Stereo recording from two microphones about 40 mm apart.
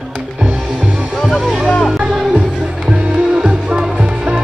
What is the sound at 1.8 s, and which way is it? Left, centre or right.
Music, centre.